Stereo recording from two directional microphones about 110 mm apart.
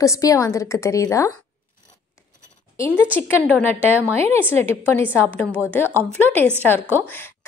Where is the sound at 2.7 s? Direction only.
30° left (ahead or behind).